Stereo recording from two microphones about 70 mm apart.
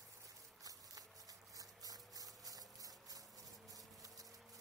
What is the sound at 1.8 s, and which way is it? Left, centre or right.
Music, right.